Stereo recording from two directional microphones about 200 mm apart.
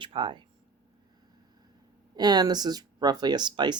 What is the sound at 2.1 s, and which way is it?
Speech, 20° right (ahead or behind).